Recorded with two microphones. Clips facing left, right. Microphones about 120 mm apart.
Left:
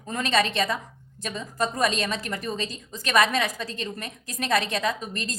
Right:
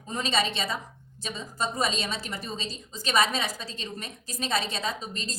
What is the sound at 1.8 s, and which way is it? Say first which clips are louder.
A woman's voice: left 5 dB; 50° left (ahead or behind).